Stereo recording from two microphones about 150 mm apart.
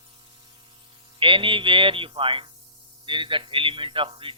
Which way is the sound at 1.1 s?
35° right (ahead or behind).